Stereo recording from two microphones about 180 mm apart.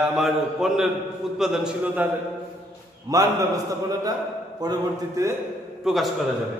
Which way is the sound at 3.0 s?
20° right (ahead or behind).